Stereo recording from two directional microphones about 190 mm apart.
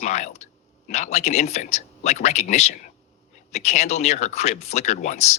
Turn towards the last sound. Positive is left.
turn(degrees=35)  # may be behind; listen again after turning